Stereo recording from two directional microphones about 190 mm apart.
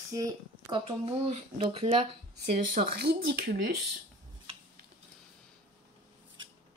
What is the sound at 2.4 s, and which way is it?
Speech, 50° right (ahead or behind).